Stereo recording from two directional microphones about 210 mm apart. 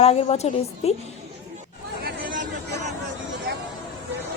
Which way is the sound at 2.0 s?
50° right (ahead or behind).